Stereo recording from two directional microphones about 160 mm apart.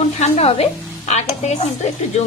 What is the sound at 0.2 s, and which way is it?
Speech, 40° left (ahead or behind).